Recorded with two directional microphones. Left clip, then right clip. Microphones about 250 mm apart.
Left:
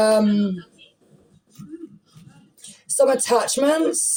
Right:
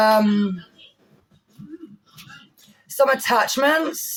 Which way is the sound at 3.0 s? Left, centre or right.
Centre.